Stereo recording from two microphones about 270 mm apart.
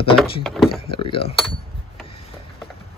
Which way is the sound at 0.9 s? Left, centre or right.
Centre.